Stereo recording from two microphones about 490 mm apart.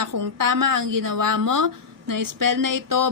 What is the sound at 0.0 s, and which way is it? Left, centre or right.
A woman's voice, right.